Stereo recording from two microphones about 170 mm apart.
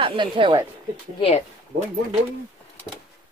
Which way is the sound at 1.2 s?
35° left (ahead or behind).